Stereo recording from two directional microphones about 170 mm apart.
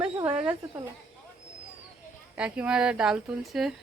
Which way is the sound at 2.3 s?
5° right (ahead or behind).